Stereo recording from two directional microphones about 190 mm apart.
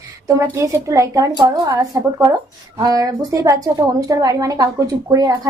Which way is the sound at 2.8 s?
20° right (ahead or behind).